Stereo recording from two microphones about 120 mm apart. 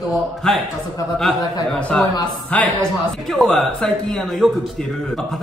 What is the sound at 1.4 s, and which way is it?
Speech, 30° left (ahead or behind).